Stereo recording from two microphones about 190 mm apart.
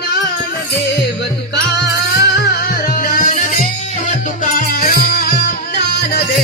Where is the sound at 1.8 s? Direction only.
60° left (ahead or behind).